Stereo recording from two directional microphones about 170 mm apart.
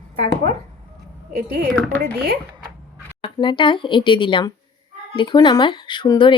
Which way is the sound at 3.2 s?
30° left (ahead or behind).